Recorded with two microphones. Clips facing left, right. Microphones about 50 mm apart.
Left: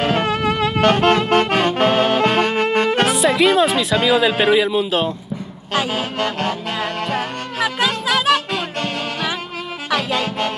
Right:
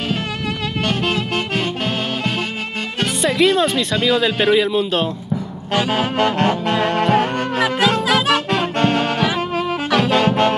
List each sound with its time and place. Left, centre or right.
0.8 s music: left
3.2 s speech: centre
5.9 s music: centre
9.8 s saxophone: centre